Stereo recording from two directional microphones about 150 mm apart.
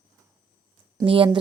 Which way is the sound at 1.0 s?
35° right (ahead or behind).